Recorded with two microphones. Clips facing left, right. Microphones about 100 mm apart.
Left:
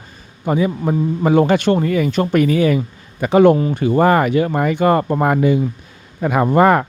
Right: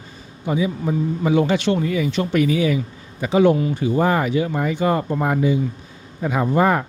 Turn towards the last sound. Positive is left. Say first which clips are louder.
# left 5 dB
turn(degrees=65)  # may be behind; listen again after turning